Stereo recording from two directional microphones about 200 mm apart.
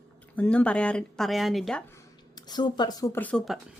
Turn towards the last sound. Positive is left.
turn(degrees=0)  # may be behind; listen again after turning